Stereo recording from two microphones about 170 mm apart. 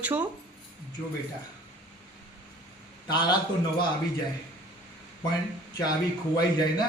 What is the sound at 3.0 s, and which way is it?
Speech, 25° left (ahead or behind).